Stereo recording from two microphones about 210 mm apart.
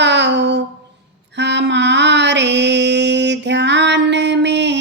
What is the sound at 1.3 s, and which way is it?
Mantra, 55° right (ahead or behind).